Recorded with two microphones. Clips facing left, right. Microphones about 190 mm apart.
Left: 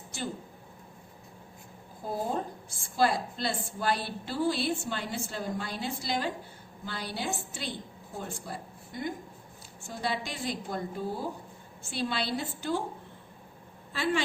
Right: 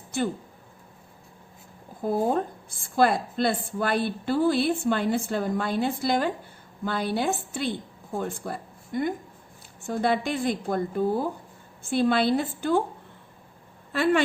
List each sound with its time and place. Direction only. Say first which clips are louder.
0.1 s a woman's voice: right 10 dB; 55° right (ahead or behind)
2.0 s a woman's voice: right 8 dB; 55° right (ahead or behind)
13.9 s speech: right 7 dB; 60° right (ahead or behind)